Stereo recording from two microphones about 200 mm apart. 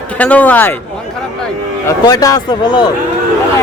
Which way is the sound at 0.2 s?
5° left (ahead or behind).